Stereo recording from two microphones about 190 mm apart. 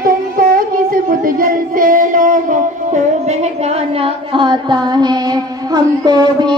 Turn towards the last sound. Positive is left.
turn(degrees=-20)  # may be behind; listen again after turning